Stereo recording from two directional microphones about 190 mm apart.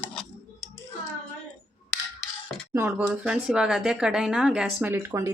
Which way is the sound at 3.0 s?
5° right (ahead or behind).